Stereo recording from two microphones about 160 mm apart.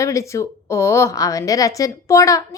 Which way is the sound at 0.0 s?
20° left (ahead or behind).